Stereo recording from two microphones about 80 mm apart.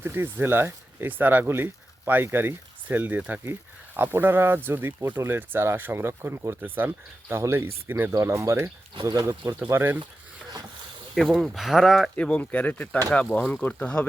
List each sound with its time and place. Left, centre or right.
0.0 s speech: right
8.1 s speech: right
11.1 s speech: centre
12.1 s speech: centre